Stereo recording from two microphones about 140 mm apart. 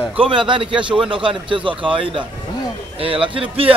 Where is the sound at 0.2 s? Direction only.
35° right (ahead or behind).